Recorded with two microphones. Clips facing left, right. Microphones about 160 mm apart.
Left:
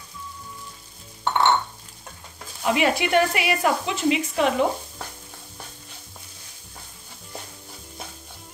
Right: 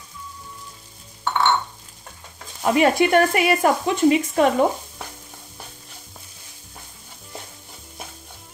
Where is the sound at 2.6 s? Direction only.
45° right (ahead or behind).